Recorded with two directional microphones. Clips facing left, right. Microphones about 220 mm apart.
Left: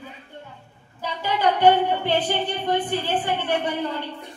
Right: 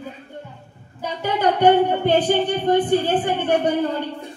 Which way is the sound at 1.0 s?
50° right (ahead or behind).